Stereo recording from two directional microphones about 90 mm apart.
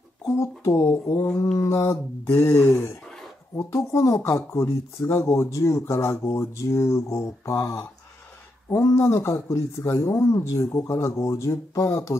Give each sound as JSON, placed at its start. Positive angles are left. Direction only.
{"t": 0.2, "sound": "speech", "side_deg": 35}
{"t": 2.8, "sound": "a sound", "side_deg": 5}
{"t": 3.5, "sound": "speech", "side_deg": 30}